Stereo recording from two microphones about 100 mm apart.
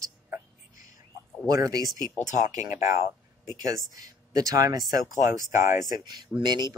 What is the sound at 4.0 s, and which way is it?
Speech, 40° right (ahead or behind).